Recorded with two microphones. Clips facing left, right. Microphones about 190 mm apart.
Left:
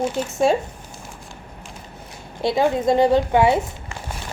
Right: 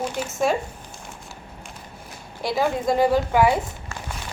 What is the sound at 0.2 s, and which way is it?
Speech, 10° right (ahead or behind).